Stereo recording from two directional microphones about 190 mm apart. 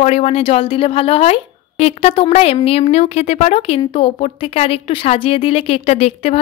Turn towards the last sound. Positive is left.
turn(degrees=30)  # may be behind; listen again after turning